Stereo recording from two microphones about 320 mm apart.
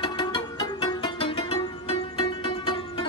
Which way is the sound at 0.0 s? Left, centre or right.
Centre.